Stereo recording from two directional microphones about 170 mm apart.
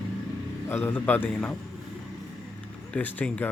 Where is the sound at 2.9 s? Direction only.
10° left (ahead or behind).